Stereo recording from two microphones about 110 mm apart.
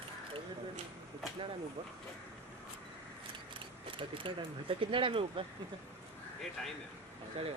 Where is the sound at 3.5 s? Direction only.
50° right (ahead or behind).